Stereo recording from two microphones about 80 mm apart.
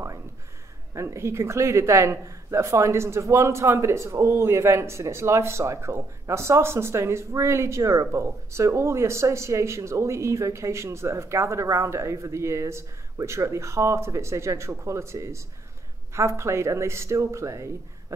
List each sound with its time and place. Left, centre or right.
0.9 s speech: right